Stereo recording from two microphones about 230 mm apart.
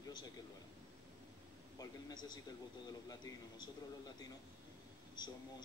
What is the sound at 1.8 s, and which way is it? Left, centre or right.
A man's voice, centre.